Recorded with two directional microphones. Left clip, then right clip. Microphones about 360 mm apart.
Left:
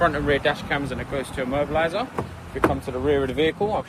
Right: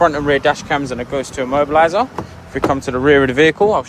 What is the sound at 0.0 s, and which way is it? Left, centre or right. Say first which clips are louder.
Speech: right 7 dB; centre.